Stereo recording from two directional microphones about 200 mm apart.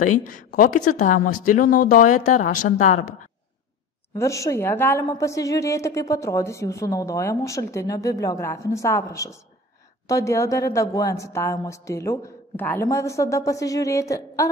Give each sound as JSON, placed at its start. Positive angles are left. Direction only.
{"t": 0.2, "sound": "speech", "side_deg": 40}
{"t": 4.2, "sound": "a woman's voice", "side_deg": 15}